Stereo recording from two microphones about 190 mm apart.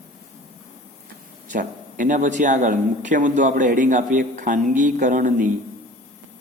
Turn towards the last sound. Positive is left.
turn(degrees=-45)  # may be behind; listen again after turning